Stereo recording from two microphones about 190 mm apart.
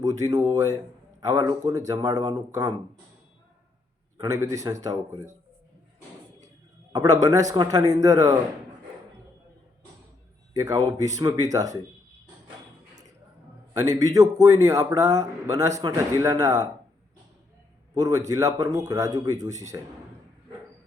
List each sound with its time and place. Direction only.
0.0 s a man's voice: 20° right (ahead or behind)
4.2 s a man's voice: 15° right (ahead or behind)
6.9 s a man's voice: 20° right (ahead or behind)
10.5 s a man's voice: 15° right (ahead or behind)
13.8 s a man's voice: 20° right (ahead or behind)
17.9 s a man's voice: 20° right (ahead or behind)